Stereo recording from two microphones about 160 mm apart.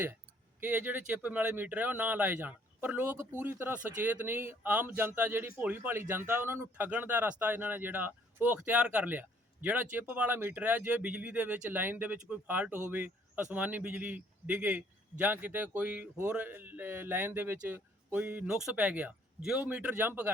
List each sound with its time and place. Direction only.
0.6 s speech: 10° right (ahead or behind)